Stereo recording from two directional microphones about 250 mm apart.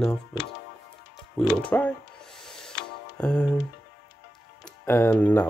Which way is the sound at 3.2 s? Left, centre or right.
Centre.